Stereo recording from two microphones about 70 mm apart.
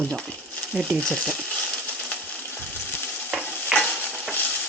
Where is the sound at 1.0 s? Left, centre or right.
Centre.